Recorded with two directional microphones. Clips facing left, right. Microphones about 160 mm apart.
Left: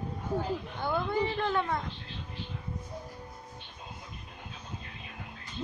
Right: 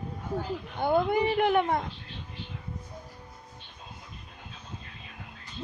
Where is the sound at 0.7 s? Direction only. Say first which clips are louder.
Right 9 dB; 50° right (ahead or behind).